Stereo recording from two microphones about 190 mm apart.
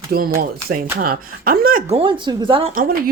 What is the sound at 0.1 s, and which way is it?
Speech, 50° right (ahead or behind).